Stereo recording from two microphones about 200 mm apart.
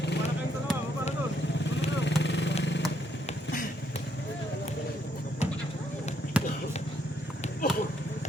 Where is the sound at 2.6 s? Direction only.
60° left (ahead or behind).